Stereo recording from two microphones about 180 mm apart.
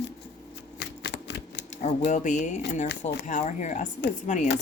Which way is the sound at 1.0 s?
70° left (ahead or behind).